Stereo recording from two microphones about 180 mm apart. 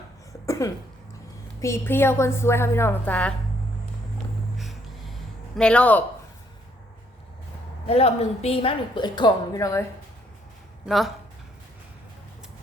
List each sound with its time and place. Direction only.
0.4 s cough: 15° left (ahead or behind)
1.6 s a woman's voice: 15° left (ahead or behind)
4.5 s a sound: centre (ahead or behind)
7.9 s a woman's voice: 35° left (ahead or behind); by 9.8 s 20° left (ahead or behind)
10.8 s speech: centre (ahead or behind)